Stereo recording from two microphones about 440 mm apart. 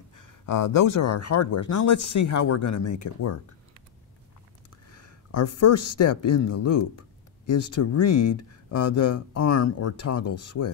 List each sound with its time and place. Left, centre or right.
0.1 s speech: left
1.1 s speech: left
5.3 s speech: left